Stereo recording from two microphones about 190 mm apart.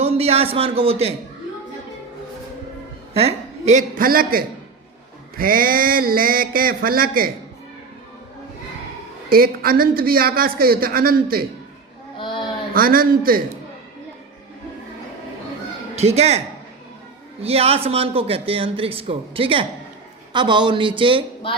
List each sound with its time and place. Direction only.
0.0 s a man's voice: 30° right (ahead or behind)
3.2 s a man's voice: 35° right (ahead or behind)
9.3 s a man's voice: 50° right (ahead or behind)
12.1 s a sound: 25° left (ahead or behind)
12.7 s a man's voice: 50° right (ahead or behind)
16.0 s a woman's voice: 35° right (ahead or behind)
17.4 s a man's voice: 30° right (ahead or behind)